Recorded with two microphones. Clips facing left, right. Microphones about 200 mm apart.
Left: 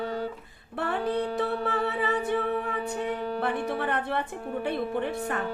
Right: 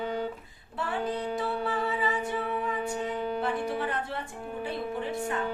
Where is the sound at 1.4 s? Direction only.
60° left (ahead or behind).